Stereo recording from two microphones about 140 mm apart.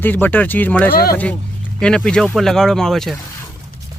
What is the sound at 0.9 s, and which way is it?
Speech, 90° left.